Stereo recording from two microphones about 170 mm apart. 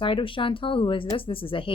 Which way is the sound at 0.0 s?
30° left (ahead or behind).